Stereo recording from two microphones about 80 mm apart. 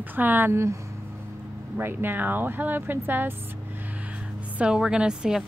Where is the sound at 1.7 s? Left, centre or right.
Right.